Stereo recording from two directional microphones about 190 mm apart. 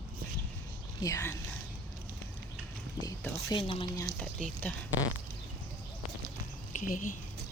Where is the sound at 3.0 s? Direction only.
20° left (ahead or behind).